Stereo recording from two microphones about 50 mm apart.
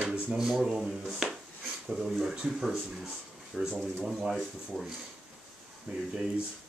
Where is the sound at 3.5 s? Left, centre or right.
Centre.